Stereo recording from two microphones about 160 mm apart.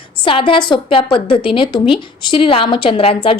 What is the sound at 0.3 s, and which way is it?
A woman's voice, 30° left (ahead or behind).